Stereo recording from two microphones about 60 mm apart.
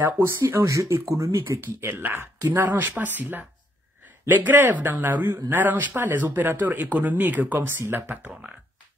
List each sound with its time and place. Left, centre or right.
0.0 s speech: right
0.7 s speech: right
8.3 s speech: centre